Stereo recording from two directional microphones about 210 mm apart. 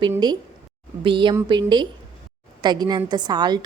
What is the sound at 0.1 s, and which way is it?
A woman's voice, 20° right (ahead or behind).